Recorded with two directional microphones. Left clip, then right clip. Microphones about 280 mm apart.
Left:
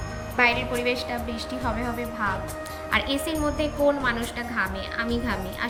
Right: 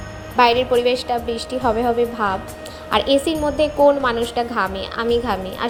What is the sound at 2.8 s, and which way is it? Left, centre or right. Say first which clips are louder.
A woman's voice: right 9 dB; centre.